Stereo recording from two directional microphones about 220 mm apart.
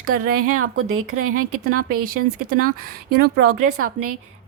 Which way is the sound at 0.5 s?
75° right (ahead or behind).